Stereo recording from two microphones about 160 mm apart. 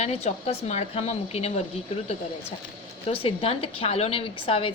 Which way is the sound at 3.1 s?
35° left (ahead or behind).